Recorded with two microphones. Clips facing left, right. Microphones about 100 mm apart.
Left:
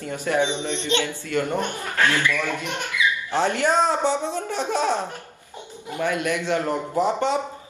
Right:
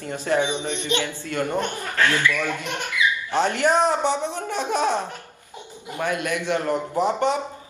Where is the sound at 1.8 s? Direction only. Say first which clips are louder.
Even; 20° left (ahead or behind).